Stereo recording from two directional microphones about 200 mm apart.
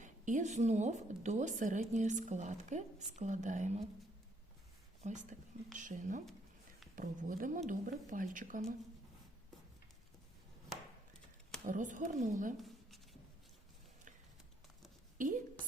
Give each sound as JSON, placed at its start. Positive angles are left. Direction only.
{"t": 0.0, "sound": "speech", "side_deg": -40}
{"t": 5.0, "sound": "speech", "side_deg": -40}
{"t": 11.6, "sound": "speech", "side_deg": -40}
{"t": 12.5, "sound": "a sound", "side_deg": 0}